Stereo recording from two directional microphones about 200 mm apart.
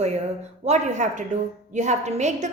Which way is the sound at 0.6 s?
35° right (ahead or behind).